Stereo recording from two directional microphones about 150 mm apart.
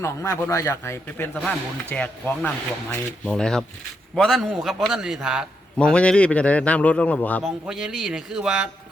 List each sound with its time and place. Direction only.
0.0 s a man's voice: 20° left (ahead or behind); by 5.5 s 5° right (ahead or behind)
5.7 s a man's voice: 5° left (ahead or behind)
7.4 s a man's voice: 5° right (ahead or behind)